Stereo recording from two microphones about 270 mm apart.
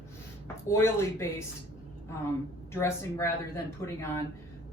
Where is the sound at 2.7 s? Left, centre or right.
Centre.